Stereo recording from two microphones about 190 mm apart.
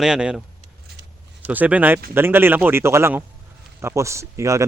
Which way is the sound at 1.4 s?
10° right (ahead or behind).